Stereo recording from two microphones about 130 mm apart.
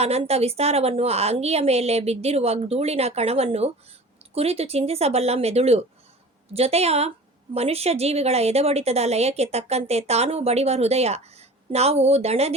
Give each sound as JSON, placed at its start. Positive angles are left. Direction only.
{"t": 0.0, "sound": "a woman's voice", "side_deg": -55}